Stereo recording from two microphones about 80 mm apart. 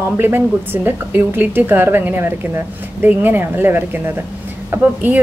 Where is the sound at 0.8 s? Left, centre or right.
Right.